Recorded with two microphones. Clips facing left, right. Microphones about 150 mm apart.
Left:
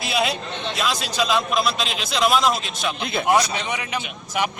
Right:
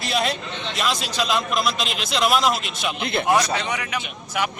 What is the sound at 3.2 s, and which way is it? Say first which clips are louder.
Speech: left 1 dB; 20° left (ahead or behind).